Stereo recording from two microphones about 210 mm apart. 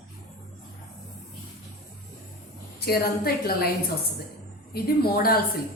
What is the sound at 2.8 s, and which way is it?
Speech, 45° left (ahead or behind).